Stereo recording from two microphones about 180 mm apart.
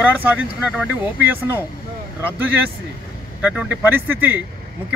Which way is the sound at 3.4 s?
5° right (ahead or behind).